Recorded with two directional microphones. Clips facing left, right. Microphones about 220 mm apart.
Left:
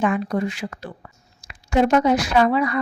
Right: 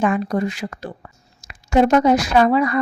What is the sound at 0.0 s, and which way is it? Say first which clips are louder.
A woman's voice: right 2 dB; 45° right (ahead or behind).